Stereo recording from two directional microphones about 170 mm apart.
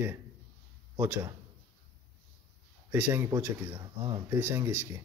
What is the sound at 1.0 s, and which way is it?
Speech, 20° right (ahead or behind).